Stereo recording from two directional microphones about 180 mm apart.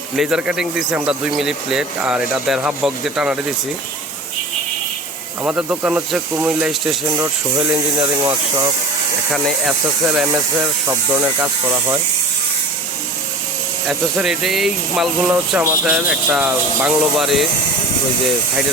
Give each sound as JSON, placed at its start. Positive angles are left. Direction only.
{"t": 0.2, "sound": "speech", "side_deg": -5}
{"t": 5.4, "sound": "speech", "side_deg": -10}
{"t": 7.9, "sound": "speech", "side_deg": -25}
{"t": 9.3, "sound": "speech", "side_deg": 0}
{"t": 13.8, "sound": "speech", "side_deg": 0}